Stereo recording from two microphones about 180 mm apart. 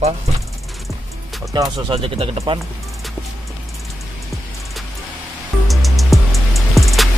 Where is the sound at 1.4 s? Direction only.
20° right (ahead or behind).